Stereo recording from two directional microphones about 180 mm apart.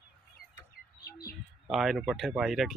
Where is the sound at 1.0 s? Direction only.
55° left (ahead or behind).